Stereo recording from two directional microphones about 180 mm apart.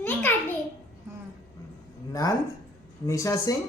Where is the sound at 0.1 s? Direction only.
10° left (ahead or behind).